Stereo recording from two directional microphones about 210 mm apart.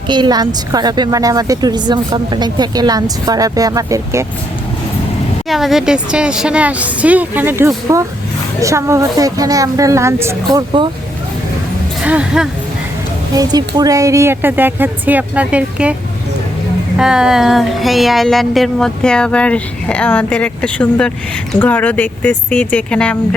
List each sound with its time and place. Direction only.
0.1 s a woman's voice: 20° right (ahead or behind)
5.5 s a woman's voice: centre (ahead or behind)
12.0 s speech: 5° right (ahead or behind)
13.3 s a woman's voice: 20° right (ahead or behind)
17.0 s speech: 5° right (ahead or behind)